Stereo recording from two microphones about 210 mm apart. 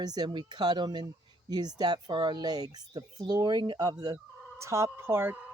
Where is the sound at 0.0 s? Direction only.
20° right (ahead or behind).